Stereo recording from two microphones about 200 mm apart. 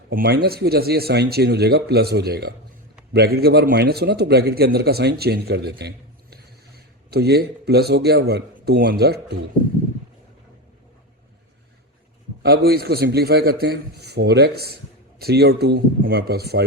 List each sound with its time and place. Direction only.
0.1 s a man's voice: 50° right (ahead or behind)
7.1 s a man's voice: 55° right (ahead or behind)
12.4 s a man's voice: 50° right (ahead or behind)